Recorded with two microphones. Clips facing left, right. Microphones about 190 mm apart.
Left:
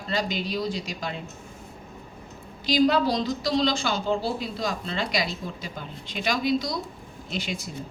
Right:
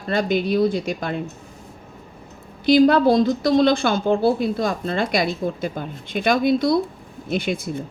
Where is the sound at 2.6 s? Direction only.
55° right (ahead or behind).